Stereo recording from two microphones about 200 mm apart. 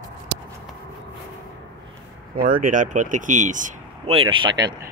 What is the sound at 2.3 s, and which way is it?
Speech, 45° right (ahead or behind).